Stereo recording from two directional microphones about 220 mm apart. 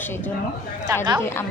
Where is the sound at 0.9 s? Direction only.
15° right (ahead or behind).